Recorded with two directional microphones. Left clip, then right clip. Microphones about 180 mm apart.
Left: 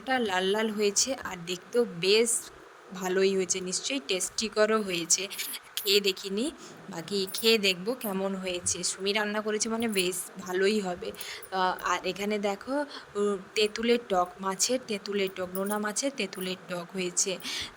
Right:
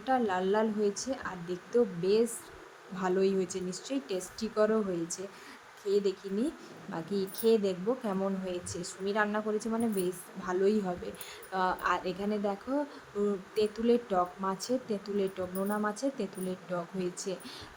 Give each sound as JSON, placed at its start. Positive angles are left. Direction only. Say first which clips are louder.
{"t": 0.1, "sound": "speech", "louder": "left 2 dB", "side_deg": 45}